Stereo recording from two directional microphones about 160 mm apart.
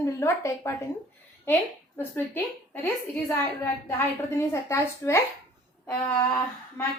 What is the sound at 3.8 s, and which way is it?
A woman's voice, 15° left (ahead or behind).